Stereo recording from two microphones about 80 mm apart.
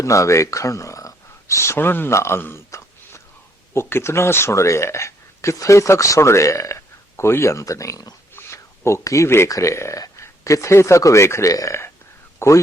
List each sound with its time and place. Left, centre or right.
0.0 s speech: left
8.4 s speech: left